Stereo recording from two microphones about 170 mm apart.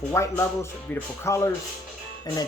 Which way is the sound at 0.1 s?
15° left (ahead or behind).